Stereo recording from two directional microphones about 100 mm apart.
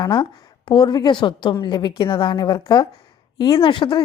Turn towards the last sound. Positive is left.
turn(degrees=55)  # may be behind; listen again after turning